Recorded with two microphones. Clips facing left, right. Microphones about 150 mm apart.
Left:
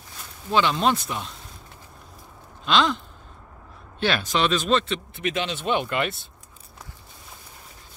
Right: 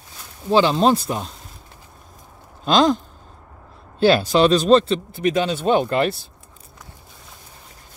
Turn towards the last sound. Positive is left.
turn(degrees=-35)  # may be behind; listen again after turning